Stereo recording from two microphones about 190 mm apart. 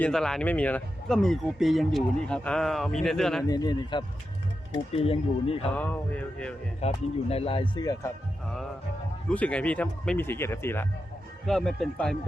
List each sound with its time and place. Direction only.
0.0 s speech: 5° left (ahead or behind)
3.4 s speech: 20° left (ahead or behind)
5.7 s speech: 10° left (ahead or behind)
6.8 s speech: 30° left (ahead or behind)
9.3 s speech: 5° left (ahead or behind)
11.4 s speech: centre (ahead or behind)